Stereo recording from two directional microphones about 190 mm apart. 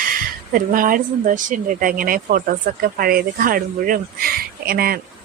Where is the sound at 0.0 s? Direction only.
45° right (ahead or behind).